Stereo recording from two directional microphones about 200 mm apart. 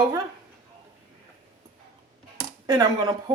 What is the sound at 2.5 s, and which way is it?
Speech, 20° right (ahead or behind).